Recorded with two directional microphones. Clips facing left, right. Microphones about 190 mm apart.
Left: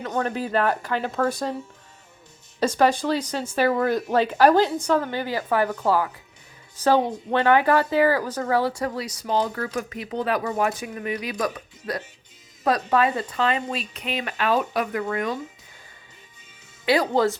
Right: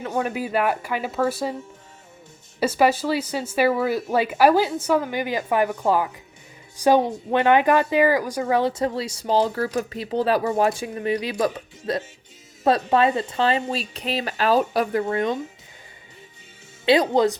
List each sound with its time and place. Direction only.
0.0 s speech: 10° right (ahead or behind)
2.6 s a woman's voice: 10° right (ahead or behind); by 15.4 s 30° right (ahead or behind)
16.8 s a woman's voice: 20° right (ahead or behind)